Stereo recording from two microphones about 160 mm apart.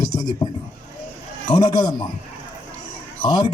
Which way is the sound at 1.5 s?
30° left (ahead or behind).